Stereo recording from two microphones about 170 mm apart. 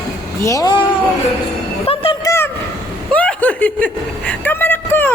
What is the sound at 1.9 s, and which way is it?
Speech, 35° left (ahead or behind).